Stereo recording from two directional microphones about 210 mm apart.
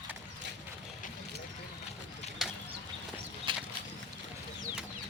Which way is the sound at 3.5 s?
25° right (ahead or behind).